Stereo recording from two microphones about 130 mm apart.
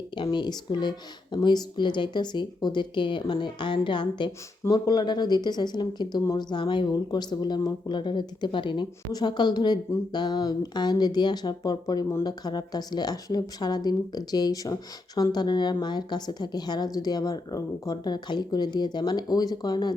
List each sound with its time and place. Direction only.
0.2 s speech: 35° left (ahead or behind)